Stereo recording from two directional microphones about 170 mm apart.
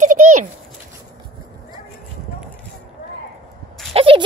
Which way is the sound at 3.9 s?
30° right (ahead or behind).